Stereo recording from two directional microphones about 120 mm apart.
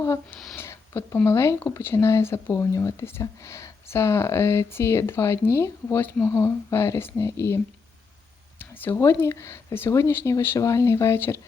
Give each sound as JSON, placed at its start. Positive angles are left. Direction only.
{"t": 0.0, "sound": "speech", "side_deg": 25}